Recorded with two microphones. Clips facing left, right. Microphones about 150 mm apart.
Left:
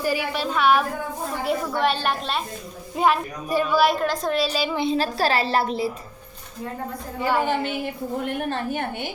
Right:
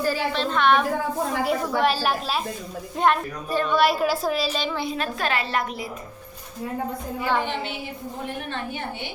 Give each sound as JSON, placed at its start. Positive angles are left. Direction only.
{"t": 0.0, "sound": "a woman's voice", "side_deg": 15}
{"t": 3.0, "sound": "a woman's voice", "side_deg": 5}
{"t": 4.7, "sound": "a woman's voice", "side_deg": 25}
{"t": 7.4, "sound": "a woman's voice", "side_deg": 45}